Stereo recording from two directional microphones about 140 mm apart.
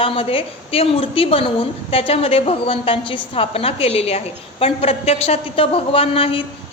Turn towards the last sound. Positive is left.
turn(degrees=40)  # may be behind; listen again after turning